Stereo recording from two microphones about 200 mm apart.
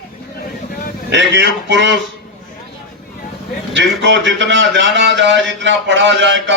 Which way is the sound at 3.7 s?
65° right (ahead or behind).